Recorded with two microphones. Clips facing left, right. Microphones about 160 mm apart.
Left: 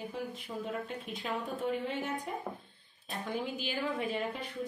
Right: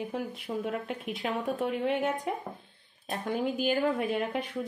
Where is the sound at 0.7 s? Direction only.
70° right (ahead or behind).